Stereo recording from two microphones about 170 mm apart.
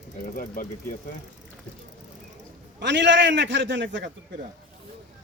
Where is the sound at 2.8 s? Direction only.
90° right.